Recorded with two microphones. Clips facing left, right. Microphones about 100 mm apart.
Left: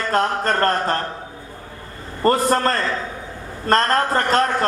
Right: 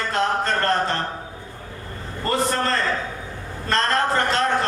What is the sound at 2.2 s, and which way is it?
A man's voice, 40° left (ahead or behind).